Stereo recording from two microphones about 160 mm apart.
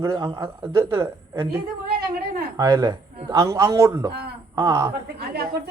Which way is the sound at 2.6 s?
25° right (ahead or behind).